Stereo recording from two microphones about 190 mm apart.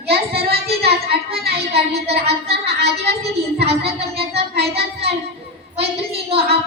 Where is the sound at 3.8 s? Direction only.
55° right (ahead or behind).